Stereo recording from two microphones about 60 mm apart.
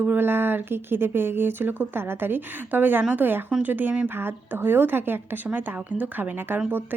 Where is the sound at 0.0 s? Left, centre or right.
Right.